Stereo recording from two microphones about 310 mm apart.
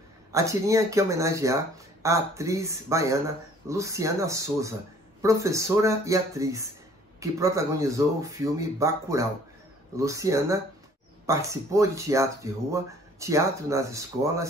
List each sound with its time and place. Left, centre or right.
0.3 s speech: centre